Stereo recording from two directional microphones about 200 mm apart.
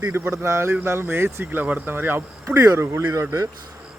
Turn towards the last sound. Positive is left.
turn(degrees=-15)  # may be behind; listen again after turning